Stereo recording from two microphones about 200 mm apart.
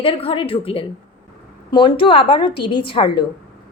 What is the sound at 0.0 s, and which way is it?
A woman's voice, 25° left (ahead or behind).